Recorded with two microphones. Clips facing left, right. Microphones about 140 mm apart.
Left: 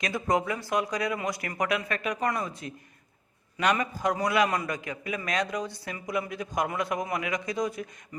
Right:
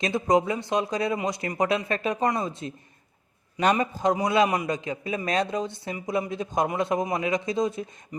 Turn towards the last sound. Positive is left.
turn(degrees=-25)  # may be behind; listen again after turning